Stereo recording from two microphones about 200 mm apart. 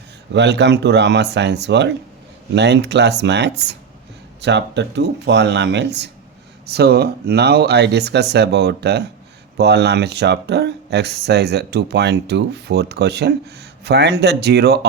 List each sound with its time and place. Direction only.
0.3 s speech: 60° right (ahead or behind)